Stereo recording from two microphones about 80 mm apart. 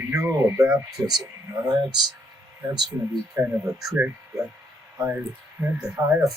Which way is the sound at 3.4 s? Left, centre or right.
Right.